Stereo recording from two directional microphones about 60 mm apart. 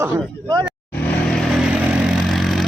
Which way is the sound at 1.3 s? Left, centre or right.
Centre.